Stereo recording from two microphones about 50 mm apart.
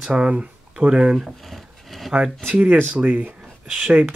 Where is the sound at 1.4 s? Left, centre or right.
Centre.